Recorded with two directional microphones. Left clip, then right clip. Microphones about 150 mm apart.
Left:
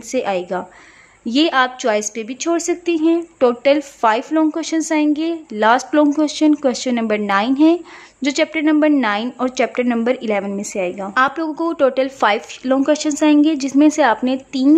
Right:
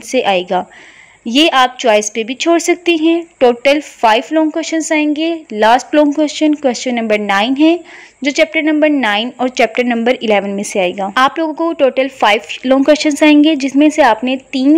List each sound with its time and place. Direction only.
0.1 s a woman's voice: 15° right (ahead or behind)